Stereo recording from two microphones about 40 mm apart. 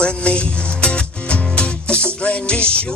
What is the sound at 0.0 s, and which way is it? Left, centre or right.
Music, left.